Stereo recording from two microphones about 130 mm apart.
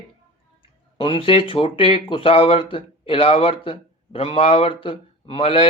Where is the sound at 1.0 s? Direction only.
40° left (ahead or behind).